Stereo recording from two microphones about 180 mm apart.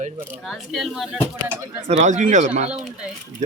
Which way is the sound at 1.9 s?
40° right (ahead or behind).